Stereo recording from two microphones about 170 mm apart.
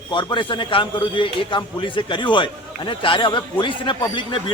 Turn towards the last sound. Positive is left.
turn(degrees=30)  # may be behind; listen again after turning